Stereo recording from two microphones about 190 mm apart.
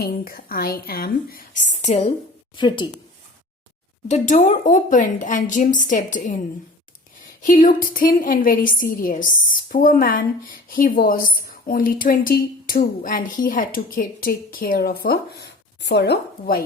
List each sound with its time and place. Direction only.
0.0 s a woman's voice: 50° left (ahead or behind); by 2.1 s 35° left (ahead or behind)
2.6 s speech: 25° left (ahead or behind)
4.1 s a woman's voice: 40° left (ahead or behind)
7.4 s a woman's voice: 45° left (ahead or behind)